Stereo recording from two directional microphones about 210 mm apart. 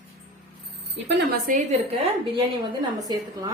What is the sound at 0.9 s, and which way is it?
Speech, 55° right (ahead or behind).